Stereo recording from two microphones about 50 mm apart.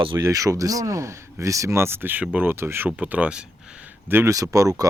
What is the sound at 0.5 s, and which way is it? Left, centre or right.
Speech, right.